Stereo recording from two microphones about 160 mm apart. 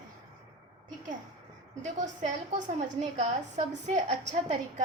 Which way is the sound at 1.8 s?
50° right (ahead or behind).